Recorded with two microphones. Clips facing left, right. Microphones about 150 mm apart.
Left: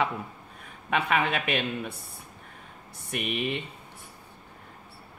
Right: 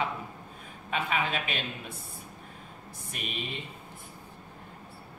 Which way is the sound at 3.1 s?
65° left (ahead or behind).